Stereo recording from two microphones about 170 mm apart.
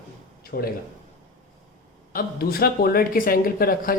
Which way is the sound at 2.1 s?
60° left (ahead or behind).